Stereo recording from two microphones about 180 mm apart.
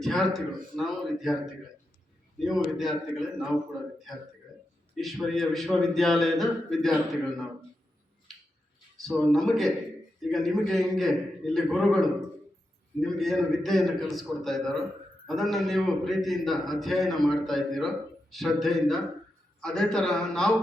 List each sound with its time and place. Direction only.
0.0 s a man's voice: centre (ahead or behind)
2.4 s a man's voice: centre (ahead or behind)
9.0 s a man's voice: centre (ahead or behind)